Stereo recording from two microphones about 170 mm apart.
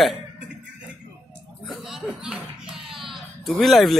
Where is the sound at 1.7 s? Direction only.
Centre (ahead or behind).